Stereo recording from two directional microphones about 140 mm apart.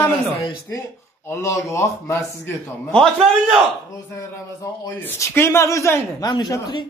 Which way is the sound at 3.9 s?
25° left (ahead or behind).